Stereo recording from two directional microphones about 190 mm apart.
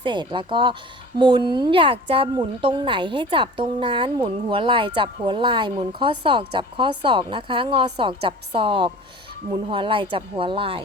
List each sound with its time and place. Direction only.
0.0 s speech: 25° right (ahead or behind)